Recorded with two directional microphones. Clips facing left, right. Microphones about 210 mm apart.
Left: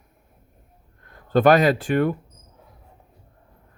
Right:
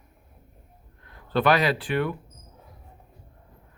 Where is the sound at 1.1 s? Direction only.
45° left (ahead or behind).